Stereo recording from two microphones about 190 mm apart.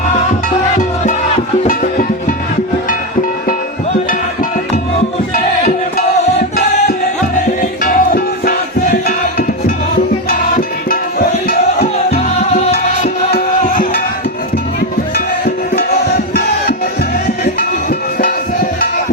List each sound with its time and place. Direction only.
1.6 s music: 45° left (ahead or behind)
5.3 s music: 35° left (ahead or behind)
7.6 s music: 45° left (ahead or behind)
10.2 s music: 50° left (ahead or behind)
12.1 s music: 35° left (ahead or behind)
12.7 s music: 50° left (ahead or behind)